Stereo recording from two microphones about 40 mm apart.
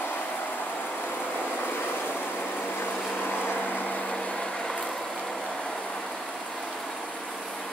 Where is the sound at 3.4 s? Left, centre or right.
Left.